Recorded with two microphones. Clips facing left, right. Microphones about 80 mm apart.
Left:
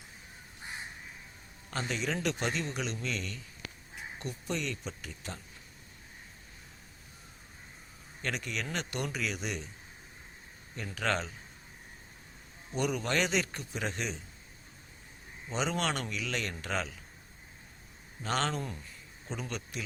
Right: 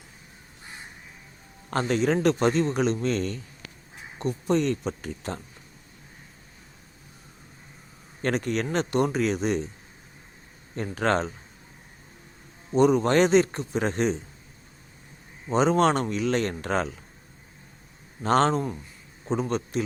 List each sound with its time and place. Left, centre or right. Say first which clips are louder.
1.7 s a man's voice: right 11 dB; right
8.2 s a man's voice: right 10 dB; right
10.8 s a man's voice: right 8 dB; right
12.7 s a man's voice: right 12 dB; right
15.4 s a man's voice: right 12 dB; right
18.2 s a man's voice: right 11 dB; right